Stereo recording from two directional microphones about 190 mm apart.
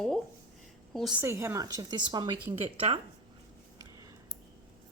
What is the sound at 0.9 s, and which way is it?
Speech, centre (ahead or behind).